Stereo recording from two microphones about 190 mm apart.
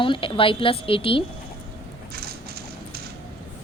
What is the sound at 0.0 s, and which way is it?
A woman's voice, 25° left (ahead or behind).